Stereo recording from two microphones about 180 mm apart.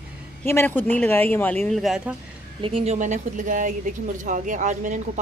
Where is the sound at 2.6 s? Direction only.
35° right (ahead or behind).